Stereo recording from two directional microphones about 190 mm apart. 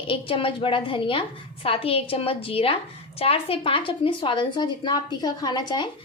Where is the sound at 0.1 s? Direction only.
30° left (ahead or behind).